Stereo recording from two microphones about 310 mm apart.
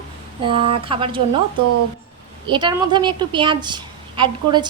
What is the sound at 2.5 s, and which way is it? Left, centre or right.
A woman's voice, centre.